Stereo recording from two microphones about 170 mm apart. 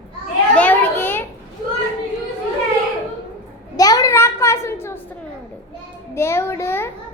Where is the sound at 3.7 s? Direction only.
20° left (ahead or behind).